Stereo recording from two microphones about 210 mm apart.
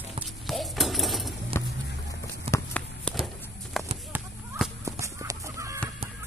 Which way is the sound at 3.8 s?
Centre (ahead or behind).